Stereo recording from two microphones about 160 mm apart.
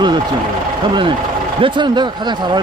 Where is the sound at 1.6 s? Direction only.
30° right (ahead or behind).